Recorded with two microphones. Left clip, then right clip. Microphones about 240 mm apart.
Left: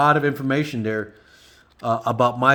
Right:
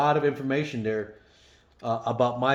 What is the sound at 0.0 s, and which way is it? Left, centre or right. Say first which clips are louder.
Speech: left 5 dB; left.